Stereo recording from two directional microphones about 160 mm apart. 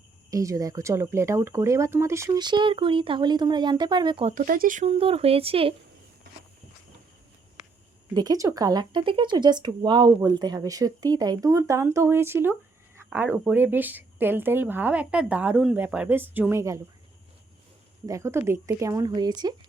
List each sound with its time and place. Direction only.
0.3 s speech: 20° right (ahead or behind)
4.3 s speech: 60° right (ahead or behind)
4.9 s speech: 35° right (ahead or behind)
8.1 s speech: 25° right (ahead or behind)
18.0 s speech: 20° right (ahead or behind)